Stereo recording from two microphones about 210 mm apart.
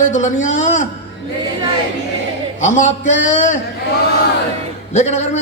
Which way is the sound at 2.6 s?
35° left (ahead or behind).